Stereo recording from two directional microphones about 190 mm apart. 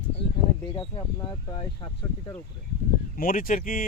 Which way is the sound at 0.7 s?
25° left (ahead or behind).